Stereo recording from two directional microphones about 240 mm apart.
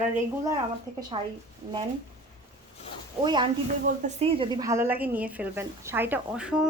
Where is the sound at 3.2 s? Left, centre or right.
Centre.